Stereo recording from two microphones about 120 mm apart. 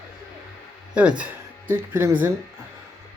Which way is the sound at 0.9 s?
10° right (ahead or behind).